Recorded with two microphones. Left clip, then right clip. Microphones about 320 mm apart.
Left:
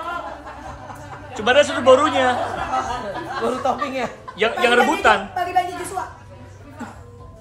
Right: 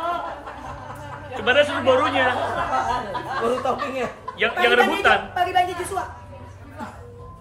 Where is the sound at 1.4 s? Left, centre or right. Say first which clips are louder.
Left 3 dB; centre.